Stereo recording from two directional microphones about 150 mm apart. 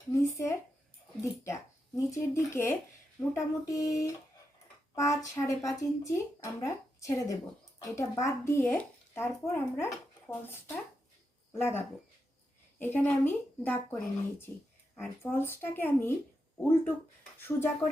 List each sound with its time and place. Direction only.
0.1 s speech: 20° left (ahead or behind)
11.5 s speech: 15° left (ahead or behind)
14.9 s speech: 15° left (ahead or behind)